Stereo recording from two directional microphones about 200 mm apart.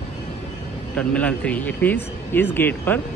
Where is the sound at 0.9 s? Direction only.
5° left (ahead or behind).